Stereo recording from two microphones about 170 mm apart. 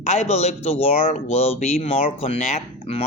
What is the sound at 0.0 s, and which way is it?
Speech, 40° left (ahead or behind).